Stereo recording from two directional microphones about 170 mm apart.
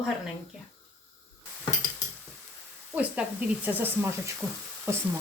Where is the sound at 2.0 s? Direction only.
20° left (ahead or behind).